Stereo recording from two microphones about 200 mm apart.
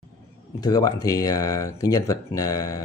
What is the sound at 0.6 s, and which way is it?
Speech, 20° left (ahead or behind).